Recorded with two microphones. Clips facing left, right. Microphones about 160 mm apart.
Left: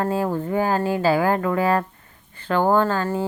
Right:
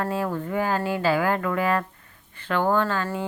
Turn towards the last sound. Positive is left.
turn(degrees=35)  # may be behind; listen again after turning